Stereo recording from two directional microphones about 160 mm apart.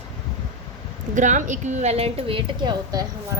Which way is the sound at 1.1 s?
50° right (ahead or behind).